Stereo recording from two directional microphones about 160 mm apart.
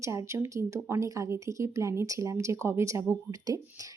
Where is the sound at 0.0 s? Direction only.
20° right (ahead or behind).